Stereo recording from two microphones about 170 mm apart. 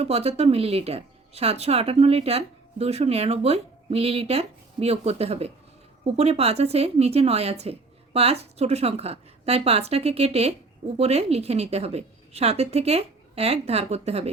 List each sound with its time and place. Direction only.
0.0 s speech: 35° right (ahead or behind)